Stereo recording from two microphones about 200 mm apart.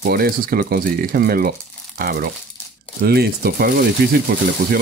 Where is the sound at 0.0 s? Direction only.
50° right (ahead or behind).